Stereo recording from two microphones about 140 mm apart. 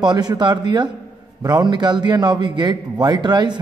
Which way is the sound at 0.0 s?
30° right (ahead or behind).